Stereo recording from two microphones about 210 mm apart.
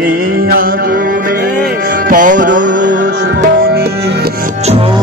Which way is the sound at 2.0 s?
40° right (ahead or behind).